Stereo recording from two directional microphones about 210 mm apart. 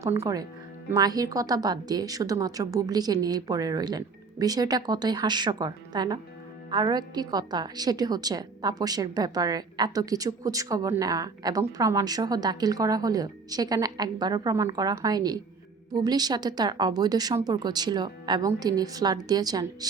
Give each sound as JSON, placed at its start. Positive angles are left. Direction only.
{"t": 0.0, "sound": "a woman's voice", "side_deg": -15}